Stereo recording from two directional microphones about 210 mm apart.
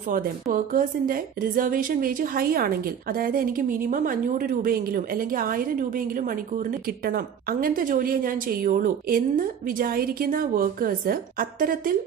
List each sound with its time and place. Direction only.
0.1 s a woman's voice: 40° right (ahead or behind)